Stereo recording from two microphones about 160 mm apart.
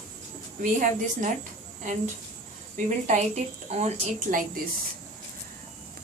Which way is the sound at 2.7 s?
50° right (ahead or behind).